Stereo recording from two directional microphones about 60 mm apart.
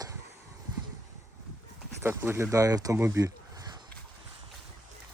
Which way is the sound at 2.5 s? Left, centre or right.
Right.